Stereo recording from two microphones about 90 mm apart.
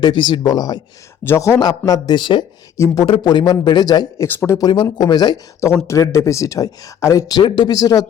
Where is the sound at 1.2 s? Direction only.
30° left (ahead or behind).